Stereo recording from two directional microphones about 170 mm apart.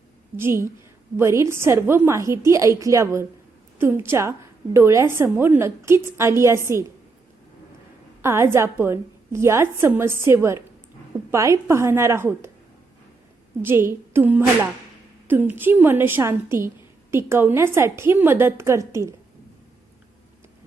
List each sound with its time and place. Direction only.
0.3 s a woman's voice: 15° right (ahead or behind)
8.2 s a woman's voice: 15° right (ahead or behind)
13.6 s a woman's voice: 15° right (ahead or behind)